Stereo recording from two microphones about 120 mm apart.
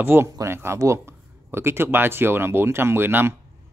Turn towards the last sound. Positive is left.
turn(degrees=-15)  # may be behind; listen again after turning